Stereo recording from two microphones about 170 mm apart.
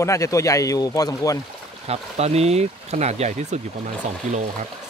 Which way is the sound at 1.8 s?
40° right (ahead or behind).